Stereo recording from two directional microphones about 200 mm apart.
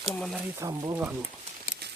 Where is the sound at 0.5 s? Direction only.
15° right (ahead or behind).